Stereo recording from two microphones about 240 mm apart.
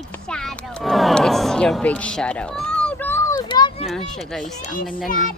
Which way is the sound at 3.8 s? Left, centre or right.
Centre.